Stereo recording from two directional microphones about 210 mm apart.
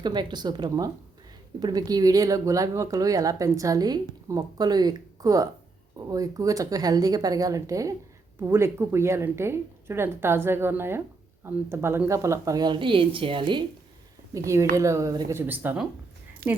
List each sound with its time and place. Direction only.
0.0 s a woman's voice: 20° right (ahead or behind)
16.4 s speech: 45° right (ahead or behind)